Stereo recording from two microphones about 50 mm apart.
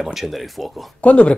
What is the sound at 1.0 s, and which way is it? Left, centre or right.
Speech, left.